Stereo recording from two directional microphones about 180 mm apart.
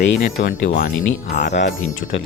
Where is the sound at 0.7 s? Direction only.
55° left (ahead or behind).